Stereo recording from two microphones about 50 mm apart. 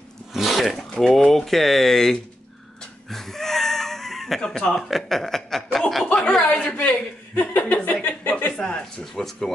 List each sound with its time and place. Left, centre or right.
0.3 s zipper: centre
0.8 s speech: centre
1.1 s speech: centre
3.1 s a sound: centre
4.8 s speech: centre
6.3 s speech: left
9.0 s speech: centre